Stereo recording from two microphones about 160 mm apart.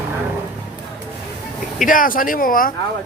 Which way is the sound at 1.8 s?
60° left (ahead or behind).